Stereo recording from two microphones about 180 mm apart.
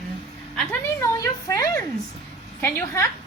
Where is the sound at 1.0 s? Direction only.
15° left (ahead or behind).